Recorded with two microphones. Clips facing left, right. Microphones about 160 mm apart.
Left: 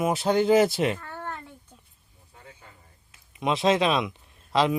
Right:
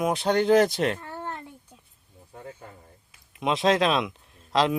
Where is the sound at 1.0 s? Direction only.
20° right (ahead or behind).